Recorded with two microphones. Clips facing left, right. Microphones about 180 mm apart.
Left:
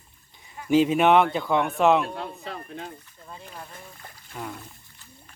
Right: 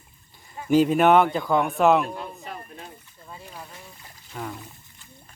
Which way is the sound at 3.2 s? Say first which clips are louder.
Even; 5° right (ahead or behind).